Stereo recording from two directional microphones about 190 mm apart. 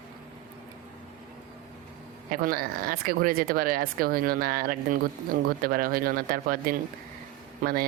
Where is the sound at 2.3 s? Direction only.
50° right (ahead or behind).